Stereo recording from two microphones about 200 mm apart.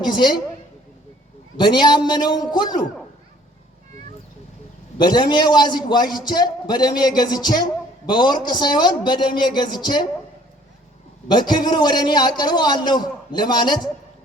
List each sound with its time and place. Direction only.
0.0 s a man's voice: 20° left (ahead or behind)
1.6 s a man's voice: 20° left (ahead or behind)
5.0 s a man's voice: 20° left (ahead or behind)
11.3 s a man's voice: 20° left (ahead or behind)